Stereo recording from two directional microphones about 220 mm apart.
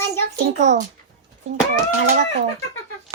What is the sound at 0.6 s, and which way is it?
Speech, 30° right (ahead or behind).